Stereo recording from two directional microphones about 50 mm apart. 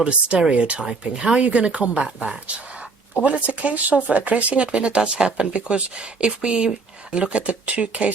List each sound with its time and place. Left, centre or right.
0.0 s speech: centre
3.2 s speech: right